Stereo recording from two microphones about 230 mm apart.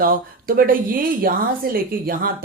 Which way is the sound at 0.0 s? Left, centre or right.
Right.